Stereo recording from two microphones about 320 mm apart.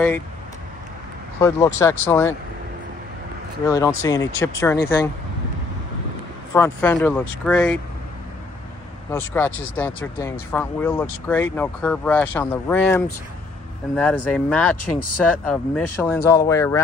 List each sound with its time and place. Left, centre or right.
1.4 s speech: centre
3.6 s speech: centre
6.5 s speech: centre
9.3 s speech: centre
14.8 s speech: left
15.4 s speech: centre